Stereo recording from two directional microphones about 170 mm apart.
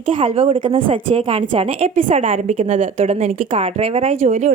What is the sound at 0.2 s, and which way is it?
A woman's voice, 35° right (ahead or behind).